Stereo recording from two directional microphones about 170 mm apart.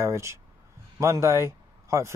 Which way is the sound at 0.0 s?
15° right (ahead or behind).